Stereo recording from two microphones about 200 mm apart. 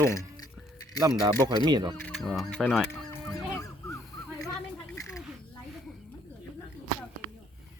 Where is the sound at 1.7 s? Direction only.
20° right (ahead or behind).